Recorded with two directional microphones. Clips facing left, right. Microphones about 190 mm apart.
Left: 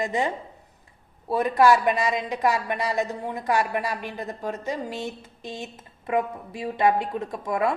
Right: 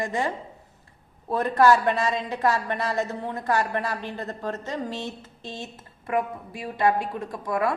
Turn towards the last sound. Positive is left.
turn(degrees=25)  # may be behind; listen again after turning